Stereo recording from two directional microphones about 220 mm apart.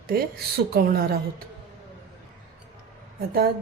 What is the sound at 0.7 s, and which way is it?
Speech, 45° right (ahead or behind).